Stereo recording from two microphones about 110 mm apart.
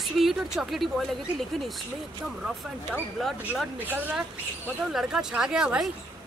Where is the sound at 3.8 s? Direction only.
15° right (ahead or behind).